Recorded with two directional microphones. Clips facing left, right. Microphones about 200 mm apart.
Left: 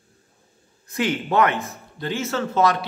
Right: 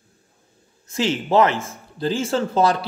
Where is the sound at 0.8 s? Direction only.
25° right (ahead or behind).